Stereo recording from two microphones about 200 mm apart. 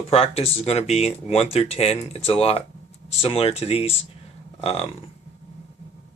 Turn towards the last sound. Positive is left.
turn(degrees=30)  # may be behind; listen again after turning